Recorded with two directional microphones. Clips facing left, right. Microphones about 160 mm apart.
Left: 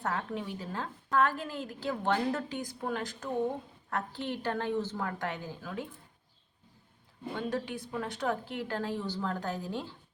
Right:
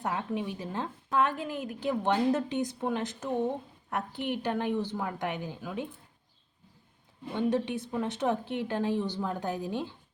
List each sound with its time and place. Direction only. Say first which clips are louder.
0.0 s a woman's voice: right 2 dB; 15° right (ahead or behind)
7.3 s a woman's voice: right 6 dB; 20° right (ahead or behind)